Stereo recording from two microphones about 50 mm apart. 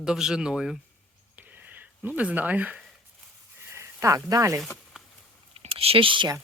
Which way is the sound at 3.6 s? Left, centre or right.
Right.